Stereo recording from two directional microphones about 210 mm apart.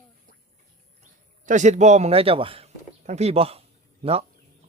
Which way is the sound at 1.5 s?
35° right (ahead or behind).